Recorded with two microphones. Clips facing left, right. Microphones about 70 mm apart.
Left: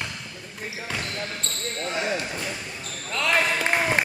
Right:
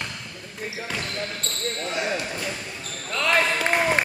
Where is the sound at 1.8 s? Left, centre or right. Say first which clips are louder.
Left 1 dB; centre.